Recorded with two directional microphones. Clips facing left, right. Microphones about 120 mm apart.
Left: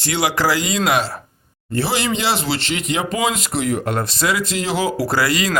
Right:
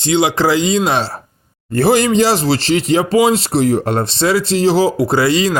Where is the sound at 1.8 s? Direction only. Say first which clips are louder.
Right 9 dB; 45° right (ahead or behind).